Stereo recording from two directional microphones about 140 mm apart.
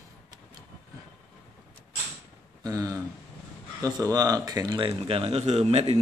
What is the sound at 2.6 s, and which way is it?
Speech, 25° right (ahead or behind).